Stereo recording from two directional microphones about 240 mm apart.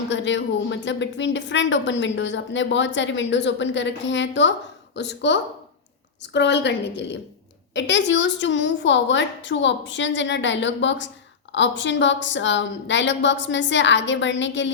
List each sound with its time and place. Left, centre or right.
0.1 s a woman's voice: left